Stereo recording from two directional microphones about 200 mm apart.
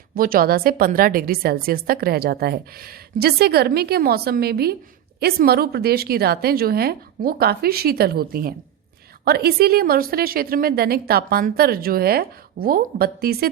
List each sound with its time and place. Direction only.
0.1 s a woman's voice: 45° right (ahead or behind)